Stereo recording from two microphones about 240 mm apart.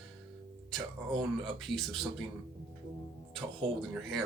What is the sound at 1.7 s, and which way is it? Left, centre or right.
Speech, centre.